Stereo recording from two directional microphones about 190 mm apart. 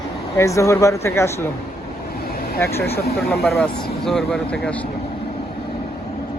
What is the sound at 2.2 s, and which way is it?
Vehicle, 50° left (ahead or behind).